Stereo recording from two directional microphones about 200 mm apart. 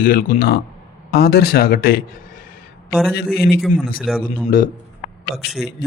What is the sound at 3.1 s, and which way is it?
Speech, 50° left (ahead or behind).